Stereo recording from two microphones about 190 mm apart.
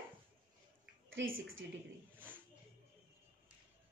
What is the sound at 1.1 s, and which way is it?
Speech, 90° right.